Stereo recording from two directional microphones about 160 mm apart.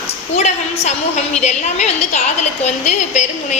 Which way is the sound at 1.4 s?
45° left (ahead or behind).